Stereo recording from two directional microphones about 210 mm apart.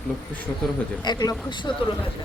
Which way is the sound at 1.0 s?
20° left (ahead or behind).